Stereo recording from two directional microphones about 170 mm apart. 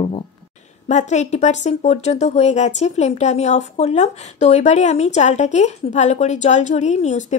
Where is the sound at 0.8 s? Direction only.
45° left (ahead or behind).